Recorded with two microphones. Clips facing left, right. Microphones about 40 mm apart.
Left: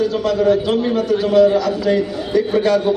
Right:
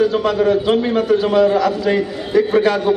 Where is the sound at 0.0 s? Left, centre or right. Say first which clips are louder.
Right 1 dB; centre.